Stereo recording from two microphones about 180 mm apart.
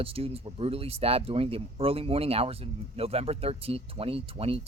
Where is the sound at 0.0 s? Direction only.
30° right (ahead or behind).